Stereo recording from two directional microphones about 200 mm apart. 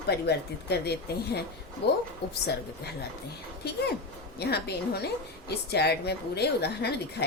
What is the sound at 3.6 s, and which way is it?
A woman's voice, 55° left (ahead or behind).